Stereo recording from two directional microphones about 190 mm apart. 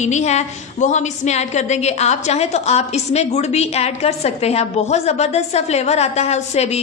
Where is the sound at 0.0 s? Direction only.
35° left (ahead or behind).